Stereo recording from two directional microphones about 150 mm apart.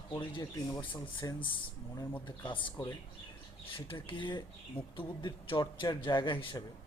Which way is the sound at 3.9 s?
35° left (ahead or behind).